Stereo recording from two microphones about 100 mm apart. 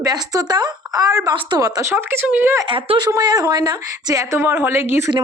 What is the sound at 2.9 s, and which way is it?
Speech, 45° right (ahead or behind).